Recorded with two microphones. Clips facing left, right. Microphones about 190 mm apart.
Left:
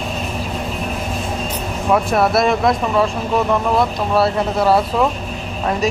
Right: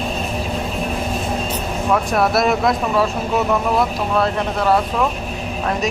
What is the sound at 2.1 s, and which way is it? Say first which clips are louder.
Speech: even; centre (ahead or behind).